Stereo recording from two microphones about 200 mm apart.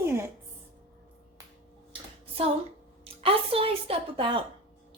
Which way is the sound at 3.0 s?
30° right (ahead or behind).